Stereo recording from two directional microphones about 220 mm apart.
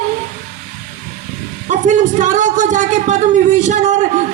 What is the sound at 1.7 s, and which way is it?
A man's voice, 35° right (ahead or behind).